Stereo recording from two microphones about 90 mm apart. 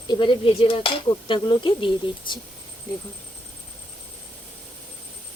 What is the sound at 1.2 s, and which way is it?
Speech, 65° left (ahead or behind).